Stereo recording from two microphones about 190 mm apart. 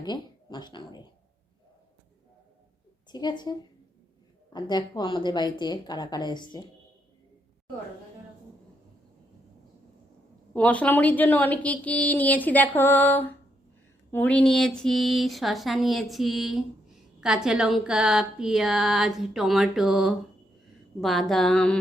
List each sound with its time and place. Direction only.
0.0 s speech: 20° left (ahead or behind)
3.1 s a woman's voice: 20° left (ahead or behind)
4.5 s a woman's voice: 25° left (ahead or behind)
10.5 s a woman's voice: 5° left (ahead or behind)